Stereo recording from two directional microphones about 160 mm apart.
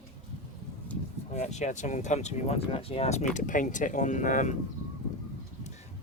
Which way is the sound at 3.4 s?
50° left (ahead or behind).